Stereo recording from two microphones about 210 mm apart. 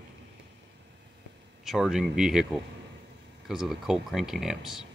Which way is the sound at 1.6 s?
Centre (ahead or behind).